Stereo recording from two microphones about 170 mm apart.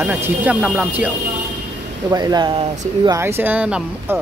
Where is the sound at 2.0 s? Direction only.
25° right (ahead or behind).